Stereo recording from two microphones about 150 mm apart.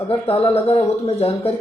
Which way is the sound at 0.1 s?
40° left (ahead or behind).